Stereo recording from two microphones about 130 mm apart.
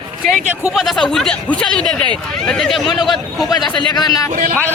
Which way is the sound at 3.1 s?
35° left (ahead or behind).